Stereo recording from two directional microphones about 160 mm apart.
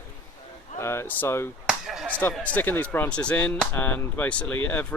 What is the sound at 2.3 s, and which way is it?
Speech, 10° left (ahead or behind).